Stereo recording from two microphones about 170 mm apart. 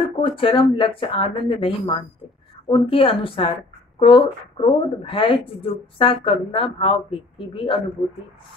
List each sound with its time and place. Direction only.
0.2 s speech: 30° left (ahead or behind)